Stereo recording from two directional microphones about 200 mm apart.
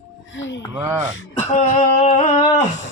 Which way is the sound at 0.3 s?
65° left (ahead or behind).